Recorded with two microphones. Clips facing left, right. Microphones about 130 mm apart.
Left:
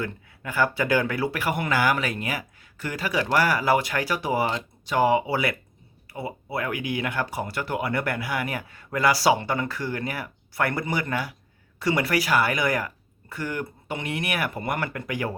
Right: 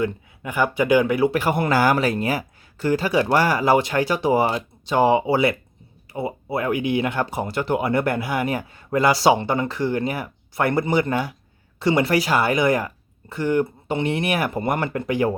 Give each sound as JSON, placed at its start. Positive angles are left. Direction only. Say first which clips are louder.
{"t": 0.0, "sound": "speech", "louder": "right 7 dB", "side_deg": -20}